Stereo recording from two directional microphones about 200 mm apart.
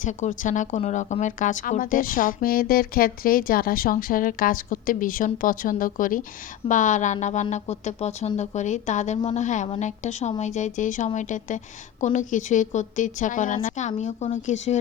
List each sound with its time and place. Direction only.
0.0 s a woman's voice: 35° left (ahead or behind)